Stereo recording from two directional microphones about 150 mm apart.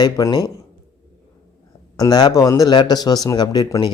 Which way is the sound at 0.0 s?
30° left (ahead or behind).